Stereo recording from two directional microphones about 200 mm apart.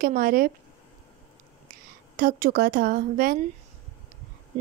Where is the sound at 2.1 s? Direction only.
45° right (ahead or behind).